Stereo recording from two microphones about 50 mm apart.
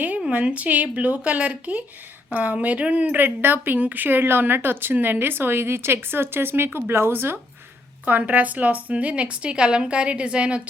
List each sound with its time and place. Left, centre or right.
0.3 s a woman's voice: right
3.2 s speech: right
8.0 s a woman's voice: right